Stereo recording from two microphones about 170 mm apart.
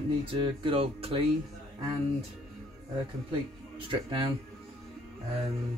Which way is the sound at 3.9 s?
30° right (ahead or behind).